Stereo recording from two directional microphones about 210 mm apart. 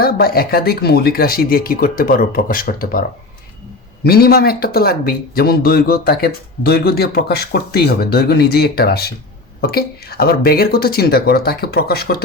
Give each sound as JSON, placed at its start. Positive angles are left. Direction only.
{"t": 0.0, "sound": "speech", "side_deg": 45}
{"t": 4.0, "sound": "speech", "side_deg": 45}